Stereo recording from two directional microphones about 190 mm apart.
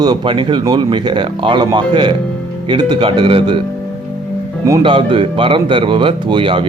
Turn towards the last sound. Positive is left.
turn(degrees=-25)  # may be behind; listen again after turning